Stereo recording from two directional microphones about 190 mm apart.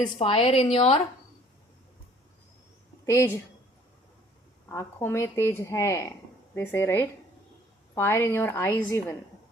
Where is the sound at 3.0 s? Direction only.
15° left (ahead or behind).